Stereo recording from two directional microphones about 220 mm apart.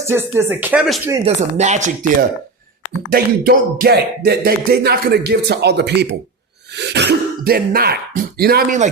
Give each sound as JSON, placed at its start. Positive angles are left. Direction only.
{"t": 0.0, "sound": "speech", "side_deg": -10}
{"t": 1.2, "sound": "speech", "side_deg": -30}
{"t": 3.1, "sound": "speech", "side_deg": -45}